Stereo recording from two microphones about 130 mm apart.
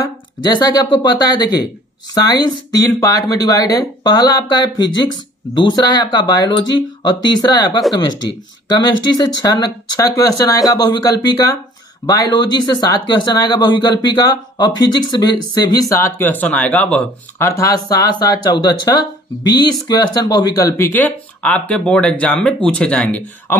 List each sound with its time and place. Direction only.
0.4 s speech: 35° left (ahead or behind); by 17.0 s 10° left (ahead or behind)
17.4 s speech: 25° left (ahead or behind)